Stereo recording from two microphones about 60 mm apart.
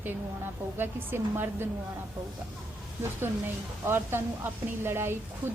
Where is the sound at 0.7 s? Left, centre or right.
Right.